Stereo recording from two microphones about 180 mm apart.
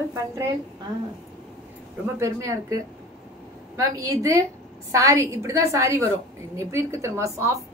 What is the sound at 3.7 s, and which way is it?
A woman's voice, 15° right (ahead or behind).